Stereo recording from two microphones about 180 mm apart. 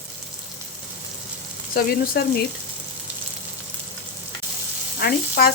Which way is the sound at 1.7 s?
60° left (ahead or behind).